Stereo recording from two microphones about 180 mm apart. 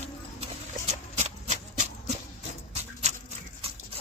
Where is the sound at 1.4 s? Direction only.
40° right (ahead or behind).